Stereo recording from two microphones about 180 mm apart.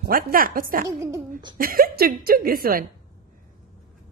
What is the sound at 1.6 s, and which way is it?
A woman's voice, 55° right (ahead or behind).